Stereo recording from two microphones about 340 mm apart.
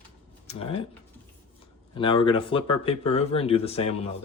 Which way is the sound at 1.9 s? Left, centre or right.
Centre.